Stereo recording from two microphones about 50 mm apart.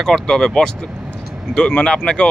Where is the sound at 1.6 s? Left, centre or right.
Left.